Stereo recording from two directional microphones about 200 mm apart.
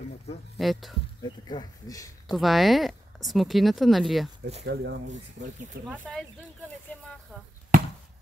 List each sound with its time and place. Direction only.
0.6 s speech: centre (ahead or behind)
1.5 s speech: 20° left (ahead or behind)
2.3 s speech: centre (ahead or behind)
4.6 s speech: 55° right (ahead or behind)
5.9 s speech: 5° right (ahead or behind)